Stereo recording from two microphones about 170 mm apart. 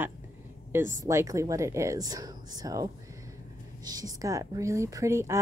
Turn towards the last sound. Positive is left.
turn(degrees=-15)  # may be behind; listen again after turning